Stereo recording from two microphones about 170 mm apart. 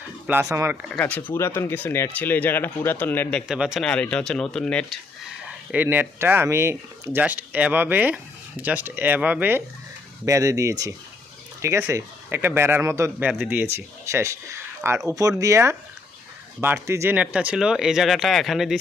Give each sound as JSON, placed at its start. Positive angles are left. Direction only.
{"t": 0.3, "sound": "speech", "side_deg": -10}
{"t": 0.9, "sound": "speech", "side_deg": 5}
{"t": 5.7, "sound": "speech", "side_deg": -10}